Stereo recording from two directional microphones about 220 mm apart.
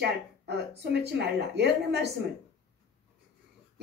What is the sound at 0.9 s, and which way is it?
Speech, 50° right (ahead or behind).